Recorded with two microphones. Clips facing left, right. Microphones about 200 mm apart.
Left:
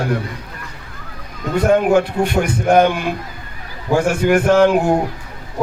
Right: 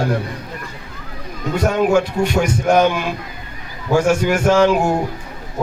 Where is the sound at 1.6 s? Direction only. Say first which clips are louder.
Left 2 dB; 55° left (ahead or behind).